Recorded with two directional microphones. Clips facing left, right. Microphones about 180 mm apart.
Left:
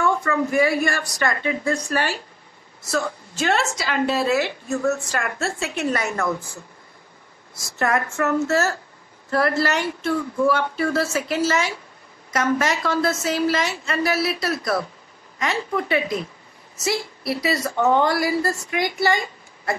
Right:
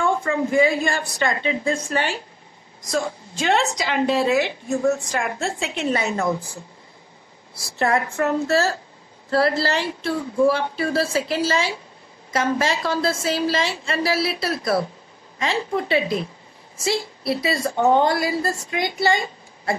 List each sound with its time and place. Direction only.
0.0 s a woman's voice: 25° right (ahead or behind)
7.8 s a woman's voice: 20° right (ahead or behind)
8.5 s a woman's voice: 30° right (ahead or behind)